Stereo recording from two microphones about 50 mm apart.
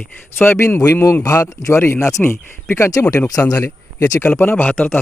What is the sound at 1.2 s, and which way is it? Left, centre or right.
Speech, left.